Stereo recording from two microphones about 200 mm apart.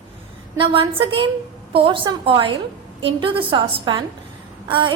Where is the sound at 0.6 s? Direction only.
25° right (ahead or behind).